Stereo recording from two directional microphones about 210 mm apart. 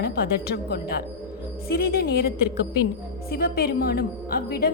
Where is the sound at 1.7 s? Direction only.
45° left (ahead or behind).